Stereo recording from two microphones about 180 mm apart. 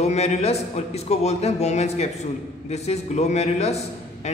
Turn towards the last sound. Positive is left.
turn(degrees=35)  # may be behind; listen again after turning